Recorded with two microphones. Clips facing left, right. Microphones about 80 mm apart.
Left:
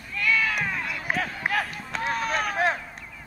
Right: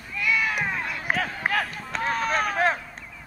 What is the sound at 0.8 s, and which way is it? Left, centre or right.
Run, right.